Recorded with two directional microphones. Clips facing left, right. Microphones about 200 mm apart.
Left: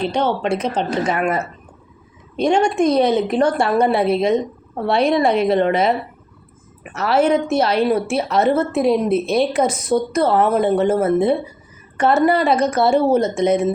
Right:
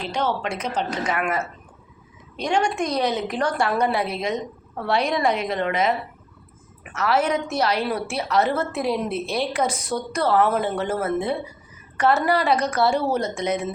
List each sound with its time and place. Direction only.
0.0 s a woman's voice: 30° left (ahead or behind)
2.4 s a woman's voice: 25° left (ahead or behind)
6.9 s a woman's voice: 30° left (ahead or behind)